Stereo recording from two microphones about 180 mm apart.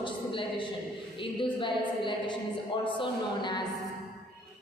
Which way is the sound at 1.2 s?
25° left (ahead or behind).